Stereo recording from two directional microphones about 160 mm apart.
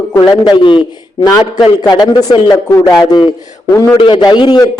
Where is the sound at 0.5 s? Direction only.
30° left (ahead or behind).